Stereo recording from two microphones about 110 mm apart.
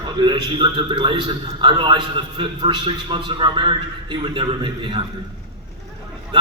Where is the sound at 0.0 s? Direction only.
45° right (ahead or behind).